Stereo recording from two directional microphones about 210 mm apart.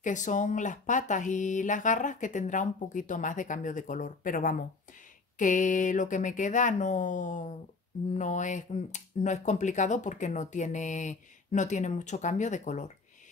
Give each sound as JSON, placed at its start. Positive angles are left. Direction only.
{"t": 0.0, "sound": "speech", "side_deg": 35}